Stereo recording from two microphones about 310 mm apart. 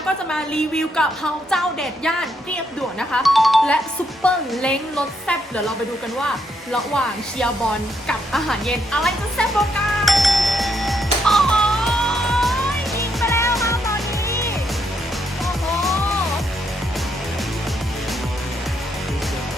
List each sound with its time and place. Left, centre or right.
0.3 s speech: centre
3.0 s speech: centre
6.2 s speech: centre
10.1 s music: centre